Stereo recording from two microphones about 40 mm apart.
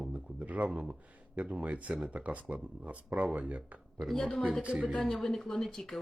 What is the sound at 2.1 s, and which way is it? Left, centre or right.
Speech, right.